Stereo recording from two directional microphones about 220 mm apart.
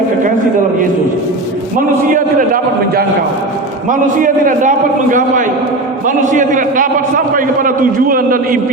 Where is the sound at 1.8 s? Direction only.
40° right (ahead or behind).